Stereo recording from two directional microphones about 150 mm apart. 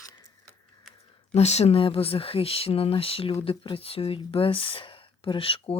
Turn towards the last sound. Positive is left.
turn(degrees=40)  # may be behind; listen again after turning